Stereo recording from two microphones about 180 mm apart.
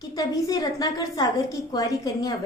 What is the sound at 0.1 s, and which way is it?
A woman's voice, 20° left (ahead or behind).